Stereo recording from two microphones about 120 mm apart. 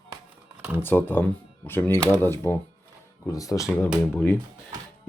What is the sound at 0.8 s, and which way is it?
Speech, 15° left (ahead or behind).